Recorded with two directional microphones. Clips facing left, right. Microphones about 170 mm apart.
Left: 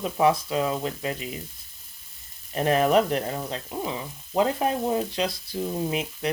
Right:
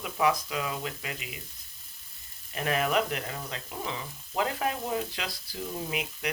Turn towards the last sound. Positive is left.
turn(degrees=30)  # may be behind; listen again after turning